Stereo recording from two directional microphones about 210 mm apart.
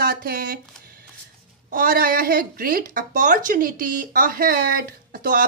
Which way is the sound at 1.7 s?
45° right (ahead or behind).